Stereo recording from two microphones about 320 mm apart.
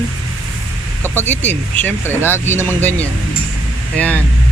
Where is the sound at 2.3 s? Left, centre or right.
Centre.